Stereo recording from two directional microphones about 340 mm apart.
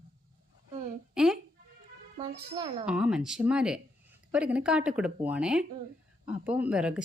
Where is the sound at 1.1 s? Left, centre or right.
Centre.